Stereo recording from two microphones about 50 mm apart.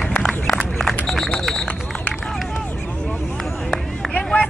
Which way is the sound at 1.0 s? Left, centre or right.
Centre.